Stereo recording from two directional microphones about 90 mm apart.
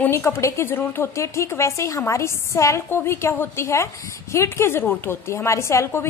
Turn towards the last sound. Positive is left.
turn(degrees=30)  # may be behind; listen again after turning